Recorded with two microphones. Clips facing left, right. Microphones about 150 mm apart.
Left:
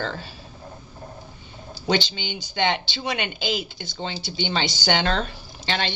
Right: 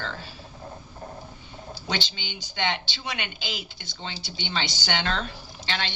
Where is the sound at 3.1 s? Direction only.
40° left (ahead or behind).